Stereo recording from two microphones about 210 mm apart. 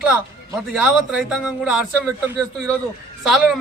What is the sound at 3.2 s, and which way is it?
Speech, centre (ahead or behind).